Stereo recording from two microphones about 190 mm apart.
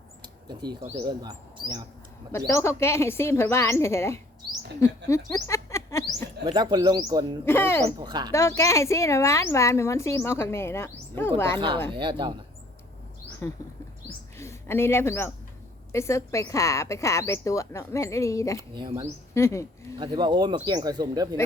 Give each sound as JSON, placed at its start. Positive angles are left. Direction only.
{"t": 0.4, "sound": "speech", "side_deg": -20}
{"t": 2.5, "sound": "speech", "side_deg": 15}
{"t": 4.8, "sound": "a sound", "side_deg": 15}
{"t": 6.4, "sound": "speech", "side_deg": -25}
{"t": 7.4, "sound": "speech", "side_deg": 10}
{"t": 7.9, "sound": "speech", "side_deg": -20}
{"t": 8.3, "sound": "speech", "side_deg": 15}
{"t": 11.9, "sound": "speech", "side_deg": -25}
{"t": 14.3, "sound": "speech", "side_deg": 15}
{"t": 18.7, "sound": "speech", "side_deg": -25}
{"t": 19.3, "sound": "speech", "side_deg": 15}
{"t": 20.0, "sound": "speech", "side_deg": -25}